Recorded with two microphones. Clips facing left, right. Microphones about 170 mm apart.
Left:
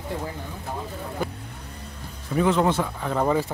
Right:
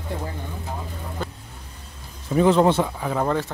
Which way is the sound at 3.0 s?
5° right (ahead or behind).